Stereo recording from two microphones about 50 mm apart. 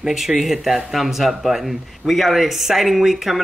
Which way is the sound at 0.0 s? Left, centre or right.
Centre.